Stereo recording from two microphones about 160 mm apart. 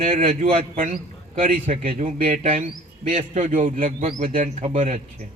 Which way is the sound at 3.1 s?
50° right (ahead or behind).